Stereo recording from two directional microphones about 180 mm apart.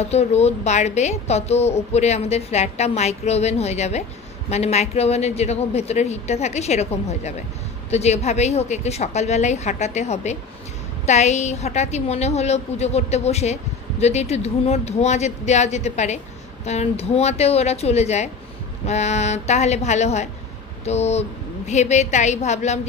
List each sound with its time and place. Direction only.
0.0 s a woman's voice: 35° left (ahead or behind)